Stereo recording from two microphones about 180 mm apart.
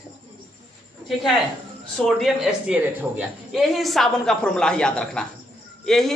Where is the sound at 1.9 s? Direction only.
Centre (ahead or behind).